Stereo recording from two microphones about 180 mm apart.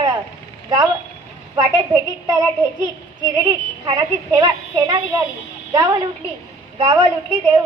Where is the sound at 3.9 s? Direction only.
20° right (ahead or behind).